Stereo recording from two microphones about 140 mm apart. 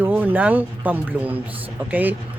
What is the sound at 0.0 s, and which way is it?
Speech, 10° right (ahead or behind).